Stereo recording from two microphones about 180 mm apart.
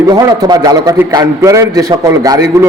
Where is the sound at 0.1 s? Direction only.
25° right (ahead or behind).